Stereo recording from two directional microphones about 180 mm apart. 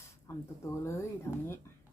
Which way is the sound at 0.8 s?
15° left (ahead or behind).